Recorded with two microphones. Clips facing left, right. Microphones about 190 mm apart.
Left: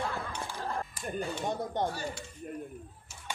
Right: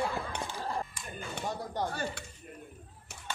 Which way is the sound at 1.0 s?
35° left (ahead or behind).